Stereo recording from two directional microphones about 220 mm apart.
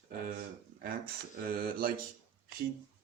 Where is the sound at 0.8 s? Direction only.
40° right (ahead or behind).